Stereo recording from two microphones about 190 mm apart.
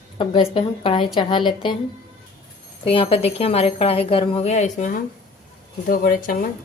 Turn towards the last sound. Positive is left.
turn(degrees=45)  # may be behind; listen again after turning